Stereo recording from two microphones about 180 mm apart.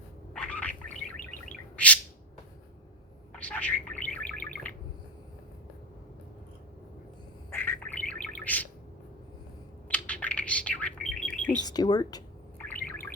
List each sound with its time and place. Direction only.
0.3 s rodents: 5° left (ahead or behind)
1.7 s bird: 10° left (ahead or behind)
3.3 s bird: 10° left (ahead or behind)
7.5 s bird: 10° left (ahead or behind)
9.9 s bird: 10° left (ahead or behind)
11.6 s speech: 20° left (ahead or behind)
12.5 s bird: 10° left (ahead or behind)